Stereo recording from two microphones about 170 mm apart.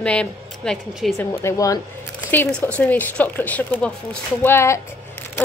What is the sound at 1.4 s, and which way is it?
A woman's voice, 20° left (ahead or behind).